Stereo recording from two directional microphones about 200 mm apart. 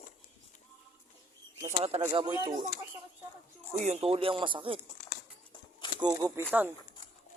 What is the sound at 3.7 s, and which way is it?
Speech, 35° right (ahead or behind).